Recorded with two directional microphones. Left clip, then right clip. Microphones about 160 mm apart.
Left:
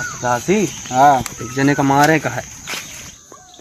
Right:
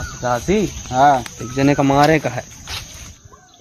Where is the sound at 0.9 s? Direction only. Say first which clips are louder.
Left 2 dB; 10° right (ahead or behind).